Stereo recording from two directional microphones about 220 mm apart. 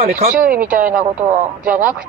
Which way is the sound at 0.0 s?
40° right (ahead or behind).